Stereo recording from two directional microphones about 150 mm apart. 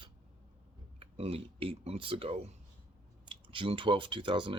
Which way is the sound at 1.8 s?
40° right (ahead or behind).